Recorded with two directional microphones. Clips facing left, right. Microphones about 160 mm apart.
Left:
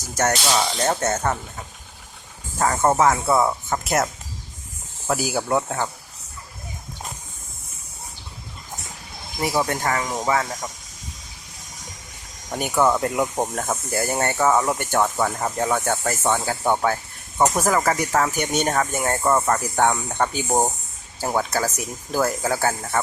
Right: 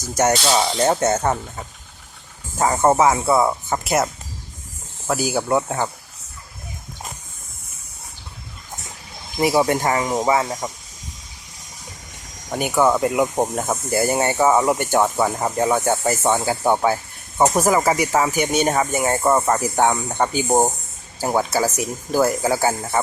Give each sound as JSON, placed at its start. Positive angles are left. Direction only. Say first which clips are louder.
{"t": 0.2, "sound": "speech", "louder": "right 3 dB", "side_deg": -15}
{"t": 2.6, "sound": "speech", "louder": "right 3 dB", "side_deg": -15}
{"t": 9.4, "sound": "speech", "louder": "right 5 dB", "side_deg": -15}
{"t": 12.5, "sound": "speech", "louder": "right 2 dB", "side_deg": -5}
{"t": 20.5, "sound": "speech", "louder": "right 5 dB", "side_deg": -20}
{"t": 21.2, "sound": "speech", "louder": "right 3 dB", "side_deg": -5}